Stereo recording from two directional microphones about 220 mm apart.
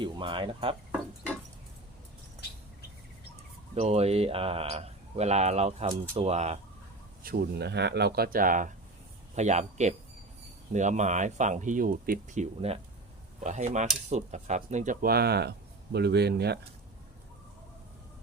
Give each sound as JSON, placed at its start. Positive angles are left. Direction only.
{"t": 0.0, "sound": "speech", "side_deg": -20}
{"t": 3.8, "sound": "speech", "side_deg": -30}
{"t": 7.2, "sound": "speech", "side_deg": -45}